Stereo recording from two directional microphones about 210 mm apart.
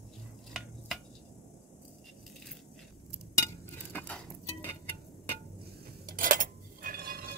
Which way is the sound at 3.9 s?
5° left (ahead or behind).